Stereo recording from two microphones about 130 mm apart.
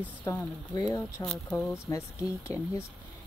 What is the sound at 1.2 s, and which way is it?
Speech, 5° left (ahead or behind).